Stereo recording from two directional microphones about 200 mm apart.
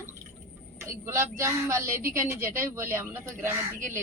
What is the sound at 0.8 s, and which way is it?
A woman's voice, 15° right (ahead or behind).